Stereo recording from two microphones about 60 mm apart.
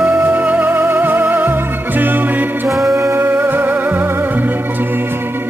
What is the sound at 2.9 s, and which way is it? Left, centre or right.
Music, right.